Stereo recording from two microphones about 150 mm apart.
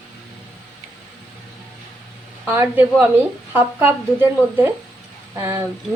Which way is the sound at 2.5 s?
15° right (ahead or behind).